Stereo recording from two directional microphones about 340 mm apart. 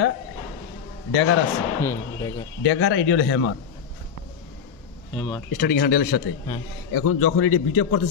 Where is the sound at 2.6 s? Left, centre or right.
Left.